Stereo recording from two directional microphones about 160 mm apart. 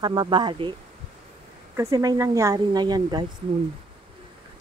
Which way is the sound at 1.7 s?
20° right (ahead or behind).